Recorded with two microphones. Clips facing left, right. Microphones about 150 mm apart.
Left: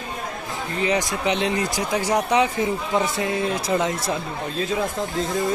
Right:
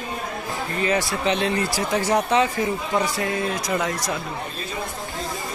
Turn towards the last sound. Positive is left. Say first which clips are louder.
# left 6 dB
turn(degrees=90)